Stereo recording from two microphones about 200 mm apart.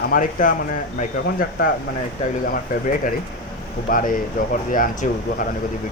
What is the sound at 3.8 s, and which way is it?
Speech, 45° left (ahead or behind).